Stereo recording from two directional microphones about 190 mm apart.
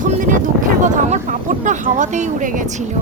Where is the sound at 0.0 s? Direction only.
40° right (ahead or behind).